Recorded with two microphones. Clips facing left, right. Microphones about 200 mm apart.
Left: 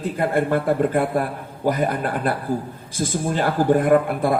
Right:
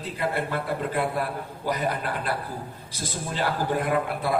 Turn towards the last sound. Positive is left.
turn(degrees=50)  # may be behind; listen again after turning